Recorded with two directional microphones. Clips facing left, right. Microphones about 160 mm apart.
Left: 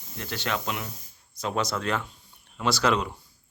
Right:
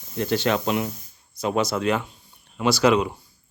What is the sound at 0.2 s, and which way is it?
Speech, 25° right (ahead or behind).